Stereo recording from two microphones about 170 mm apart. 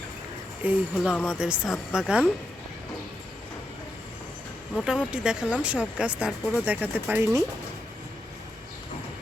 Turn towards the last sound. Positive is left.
turn(degrees=-10)  # may be behind; listen again after turning